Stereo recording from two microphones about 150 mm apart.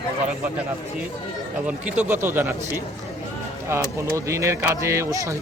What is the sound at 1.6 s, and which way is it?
Speech, 10° right (ahead or behind).